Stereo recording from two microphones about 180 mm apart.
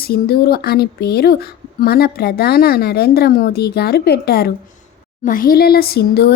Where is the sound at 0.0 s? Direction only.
60° left (ahead or behind).